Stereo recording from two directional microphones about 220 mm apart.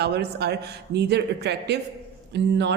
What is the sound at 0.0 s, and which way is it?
Speech, 50° right (ahead or behind).